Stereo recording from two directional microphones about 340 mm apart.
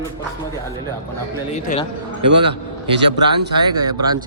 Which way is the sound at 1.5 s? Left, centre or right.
Left.